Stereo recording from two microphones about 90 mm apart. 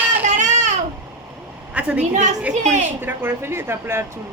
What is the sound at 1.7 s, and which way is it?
Speech, 15° right (ahead or behind).